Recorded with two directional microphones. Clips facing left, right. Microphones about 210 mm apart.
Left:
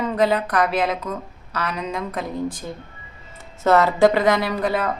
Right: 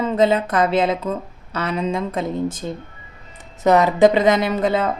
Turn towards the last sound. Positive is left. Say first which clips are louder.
# right 3 dB
turn(degrees=-20)  # may be behind; listen again after turning